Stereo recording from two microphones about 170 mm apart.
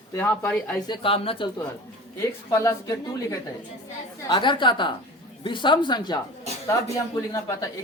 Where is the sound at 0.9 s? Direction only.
30° left (ahead or behind).